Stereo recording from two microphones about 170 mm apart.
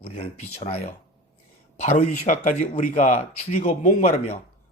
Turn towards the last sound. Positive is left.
turn(degrees=40)  # may be behind; listen again after turning